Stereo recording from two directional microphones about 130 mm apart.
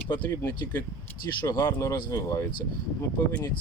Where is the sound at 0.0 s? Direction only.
15° left (ahead or behind).